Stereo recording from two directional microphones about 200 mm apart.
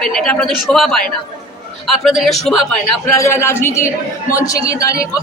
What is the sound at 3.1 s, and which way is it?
A man's voice, 15° left (ahead or behind).